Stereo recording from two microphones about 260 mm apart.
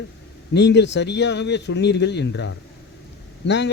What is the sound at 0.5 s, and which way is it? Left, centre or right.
Speech, left.